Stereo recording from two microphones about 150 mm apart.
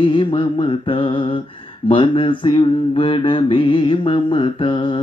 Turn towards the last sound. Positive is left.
turn(degrees=35)  # may be behind; listen again after turning